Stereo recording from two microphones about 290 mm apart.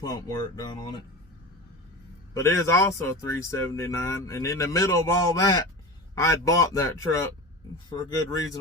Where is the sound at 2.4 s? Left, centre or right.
Centre.